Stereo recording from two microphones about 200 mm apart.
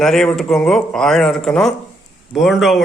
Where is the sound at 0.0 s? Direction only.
Centre (ahead or behind).